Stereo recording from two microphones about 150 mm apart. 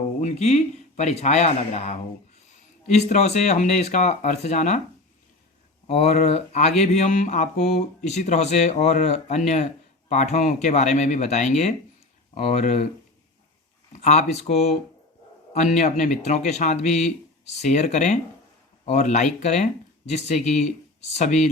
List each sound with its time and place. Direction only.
0.2 s speech: 50° left (ahead or behind)
5.9 s speech: 45° left (ahead or behind)
13.9 s speech: 50° left (ahead or behind)